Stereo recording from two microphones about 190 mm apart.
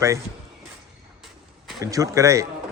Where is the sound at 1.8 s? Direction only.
15° right (ahead or behind).